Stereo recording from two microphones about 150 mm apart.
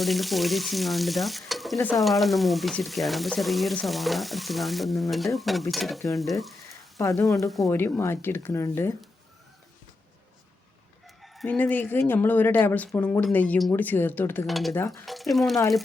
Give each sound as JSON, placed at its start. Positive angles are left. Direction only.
{"t": 0.0, "sound": "frying", "side_deg": 0}
{"t": 7.0, "sound": "frying", "side_deg": 20}
{"t": 7.7, "sound": "speech", "side_deg": 15}
{"t": 11.0, "sound": "chicken", "side_deg": 0}
{"t": 11.4, "sound": "speech", "side_deg": 10}
{"t": 14.4, "sound": "frying", "side_deg": 0}
{"t": 14.8, "sound": "frying", "side_deg": 20}
{"t": 15.0, "sound": "frying", "side_deg": 0}